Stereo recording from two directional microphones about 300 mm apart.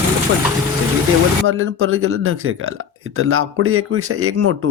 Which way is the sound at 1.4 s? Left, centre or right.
Right.